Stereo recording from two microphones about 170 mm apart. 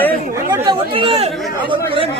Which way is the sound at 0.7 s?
30° right (ahead or behind).